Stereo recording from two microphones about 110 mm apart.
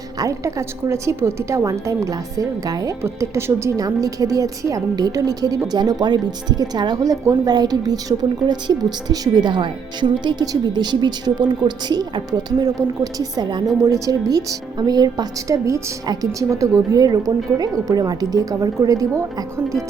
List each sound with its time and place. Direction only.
0.2 s a woman's voice: 30° right (ahead or behind)
3.0 s a woman's voice: 25° right (ahead or behind)